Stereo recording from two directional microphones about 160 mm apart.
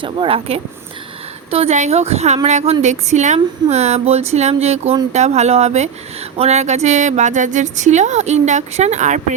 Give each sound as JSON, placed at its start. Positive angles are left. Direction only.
{"t": 0.0, "sound": "speech", "side_deg": -35}